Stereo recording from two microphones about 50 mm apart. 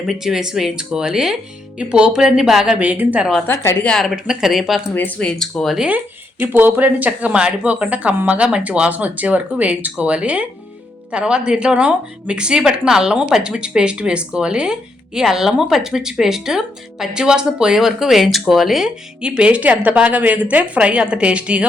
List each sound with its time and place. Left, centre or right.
0.1 s a woman's voice: centre
2.2 s speech: centre
2.7 s a woman's voice: right
3.4 s a woman's voice: left
4.1 s speech: centre
4.9 s speech: left
5.5 s speech: centre
6.4 s a woman's voice: right; by 18.9 s centre
18.9 s a woman's voice: centre